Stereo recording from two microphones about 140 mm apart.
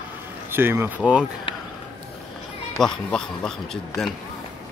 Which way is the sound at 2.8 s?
5° left (ahead or behind).